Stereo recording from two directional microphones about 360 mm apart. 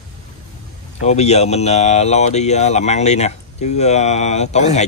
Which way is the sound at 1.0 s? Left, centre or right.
Centre.